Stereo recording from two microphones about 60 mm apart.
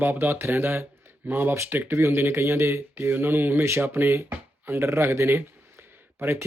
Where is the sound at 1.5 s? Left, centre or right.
Right.